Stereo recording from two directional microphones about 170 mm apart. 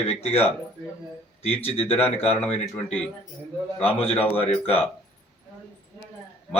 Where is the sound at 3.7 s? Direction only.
35° left (ahead or behind).